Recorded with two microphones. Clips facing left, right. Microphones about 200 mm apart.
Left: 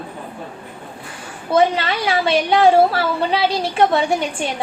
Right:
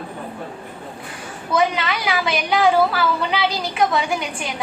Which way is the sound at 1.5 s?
30° left (ahead or behind).